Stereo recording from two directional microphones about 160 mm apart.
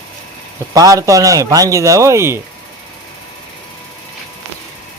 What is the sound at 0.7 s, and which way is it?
Speech, 20° right (ahead or behind).